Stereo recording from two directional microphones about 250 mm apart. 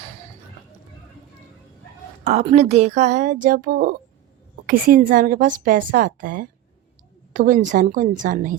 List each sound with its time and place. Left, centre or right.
2.2 s a woman's voice: right